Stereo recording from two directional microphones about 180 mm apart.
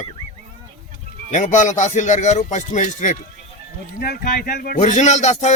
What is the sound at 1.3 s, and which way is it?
Music, 45° left (ahead or behind).